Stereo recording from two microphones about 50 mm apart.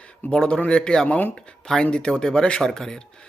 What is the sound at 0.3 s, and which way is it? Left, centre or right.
Speech, centre.